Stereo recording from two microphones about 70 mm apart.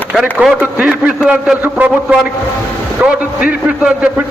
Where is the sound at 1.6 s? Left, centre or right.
Right.